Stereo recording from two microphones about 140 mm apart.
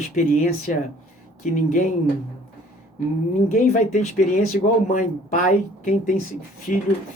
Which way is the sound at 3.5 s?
60° left (ahead or behind).